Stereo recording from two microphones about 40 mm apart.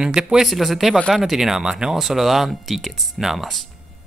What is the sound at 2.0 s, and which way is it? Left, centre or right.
Speech, centre.